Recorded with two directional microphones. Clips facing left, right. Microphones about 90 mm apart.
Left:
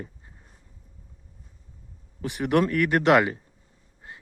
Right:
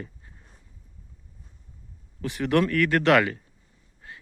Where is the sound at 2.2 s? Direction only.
20° left (ahead or behind).